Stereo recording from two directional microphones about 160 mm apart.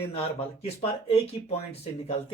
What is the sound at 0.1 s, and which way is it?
Speech, 40° left (ahead or behind).